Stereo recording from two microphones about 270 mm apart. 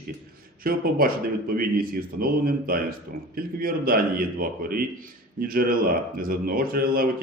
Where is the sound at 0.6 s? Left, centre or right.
Right.